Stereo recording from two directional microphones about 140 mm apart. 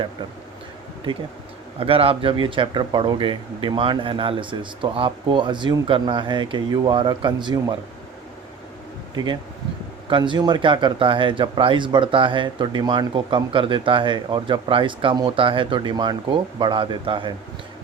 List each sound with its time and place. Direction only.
1.8 s speech: 40° right (ahead or behind)
9.1 s speech: 30° right (ahead or behind)